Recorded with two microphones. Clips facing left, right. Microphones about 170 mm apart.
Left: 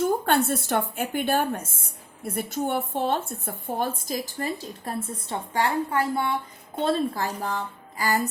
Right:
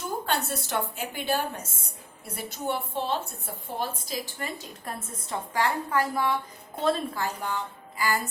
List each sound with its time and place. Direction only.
0.0 s a woman's voice: 55° left (ahead or behind)